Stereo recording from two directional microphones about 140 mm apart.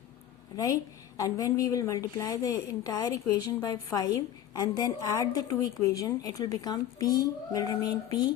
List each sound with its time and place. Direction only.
0.5 s a woman's voice: 25° left (ahead or behind)